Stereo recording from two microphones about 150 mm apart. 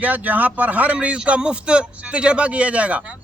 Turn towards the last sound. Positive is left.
turn(degrees=-10)  # may be behind; listen again after turning